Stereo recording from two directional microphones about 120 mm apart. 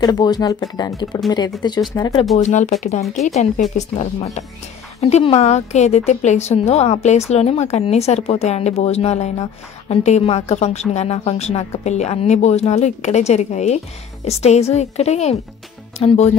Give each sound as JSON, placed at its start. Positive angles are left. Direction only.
{"t": 0.0, "sound": "speech", "side_deg": 35}
{"t": 2.3, "sound": "a woman's voice", "side_deg": 70}
{"t": 16.0, "sound": "a woman's voice", "side_deg": 55}